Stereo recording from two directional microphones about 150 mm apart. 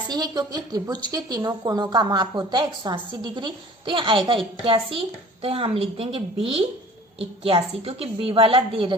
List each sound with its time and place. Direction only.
0.1 s a woman's voice: 25° right (ahead or behind)